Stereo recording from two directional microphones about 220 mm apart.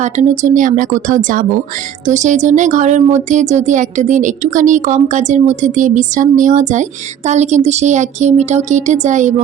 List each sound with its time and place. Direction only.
0.0 s speech: 35° right (ahead or behind)